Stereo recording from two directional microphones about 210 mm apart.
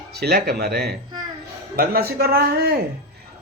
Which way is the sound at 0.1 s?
50° right (ahead or behind).